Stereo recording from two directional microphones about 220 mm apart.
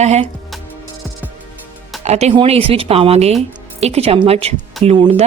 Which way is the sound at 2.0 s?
30° right (ahead or behind).